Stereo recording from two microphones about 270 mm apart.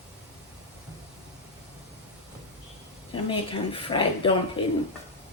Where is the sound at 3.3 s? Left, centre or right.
Centre.